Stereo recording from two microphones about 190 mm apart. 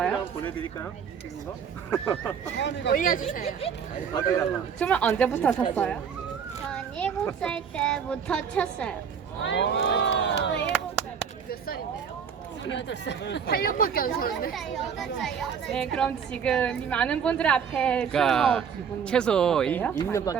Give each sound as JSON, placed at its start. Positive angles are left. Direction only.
{"t": 0.0, "sound": "a sound", "side_deg": 5}
{"t": 2.6, "sound": "speech", "side_deg": 65}
{"t": 2.9, "sound": "speech", "side_deg": 45}
{"t": 4.8, "sound": "speech", "side_deg": 5}
{"t": 9.4, "sound": "speech", "side_deg": 70}
{"t": 12.6, "sound": "speech", "side_deg": 70}
{"t": 14.5, "sound": "speech", "side_deg": 0}